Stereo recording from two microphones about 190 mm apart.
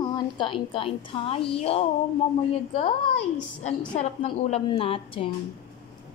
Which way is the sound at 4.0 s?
35° left (ahead or behind).